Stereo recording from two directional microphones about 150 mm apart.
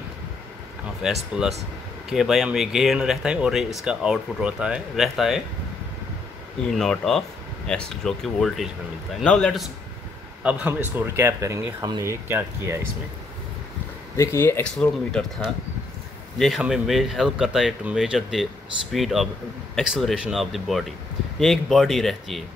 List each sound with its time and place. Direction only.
1.0 s speech: 5° right (ahead or behind)
6.7 s speech: centre (ahead or behind)
10.4 s speech: 10° right (ahead or behind)
14.1 s speech: 20° left (ahead or behind); by 22.4 s centre (ahead or behind)